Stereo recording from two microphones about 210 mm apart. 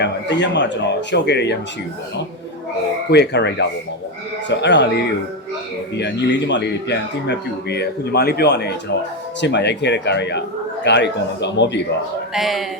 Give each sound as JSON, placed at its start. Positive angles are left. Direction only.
{"t": 0.0, "sound": "speech", "side_deg": 55}
{"t": 3.1, "sound": "a man's voice", "side_deg": 55}
{"t": 12.3, "sound": "speech", "side_deg": 0}